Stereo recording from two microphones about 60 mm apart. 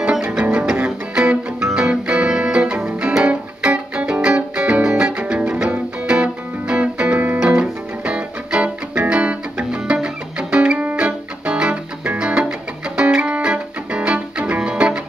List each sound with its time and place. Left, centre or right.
0.4 s music: centre